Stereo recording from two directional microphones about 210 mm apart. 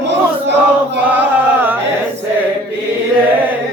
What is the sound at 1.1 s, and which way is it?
Chant, 10° right (ahead or behind).